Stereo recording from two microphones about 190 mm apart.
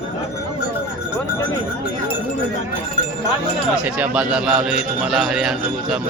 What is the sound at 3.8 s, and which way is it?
A man's voice, 5° right (ahead or behind).